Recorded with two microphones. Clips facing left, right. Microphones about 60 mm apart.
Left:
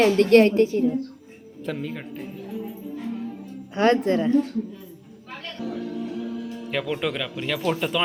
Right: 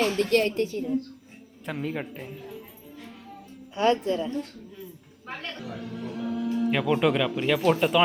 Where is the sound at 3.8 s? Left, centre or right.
Left.